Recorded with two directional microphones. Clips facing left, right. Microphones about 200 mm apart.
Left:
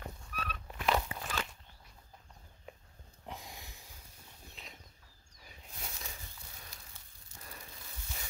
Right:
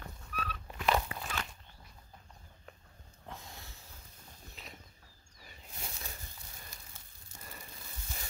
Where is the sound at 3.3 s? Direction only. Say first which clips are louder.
Left 1 dB; 15° left (ahead or behind).